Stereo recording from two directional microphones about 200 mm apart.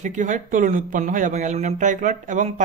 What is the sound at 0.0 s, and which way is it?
A man's voice, 40° right (ahead or behind).